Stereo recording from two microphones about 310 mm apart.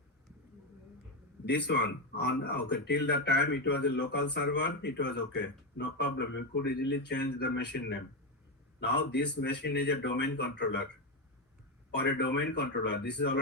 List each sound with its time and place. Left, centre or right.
1.5 s speech: left
11.9 s speech: left